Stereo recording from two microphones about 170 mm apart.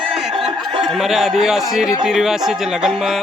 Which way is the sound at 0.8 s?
Centre (ahead or behind).